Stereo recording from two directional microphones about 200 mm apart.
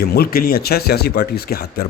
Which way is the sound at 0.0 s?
50° left (ahead or behind).